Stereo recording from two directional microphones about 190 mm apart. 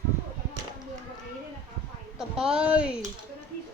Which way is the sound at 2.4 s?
5° right (ahead or behind).